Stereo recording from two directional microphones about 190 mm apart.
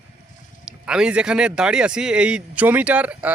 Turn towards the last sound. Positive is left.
turn(degrees=-5)  # may be behind; listen again after turning